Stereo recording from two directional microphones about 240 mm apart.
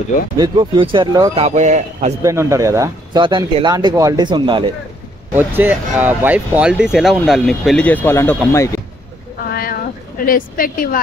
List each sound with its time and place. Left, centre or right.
0.4 s speech: centre
2.2 s speech: centre
5.3 s speech: centre
9.5 s a sound: left